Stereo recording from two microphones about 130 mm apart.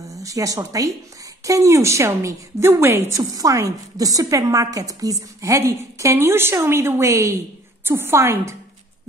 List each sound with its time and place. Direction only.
0.0 s a woman's voice: 25° right (ahead or behind)